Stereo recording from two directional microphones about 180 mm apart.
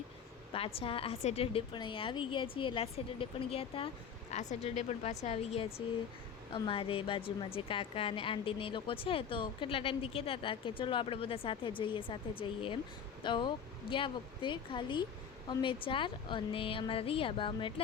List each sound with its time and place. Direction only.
0.5 s a woman's voice: 30° left (ahead or behind)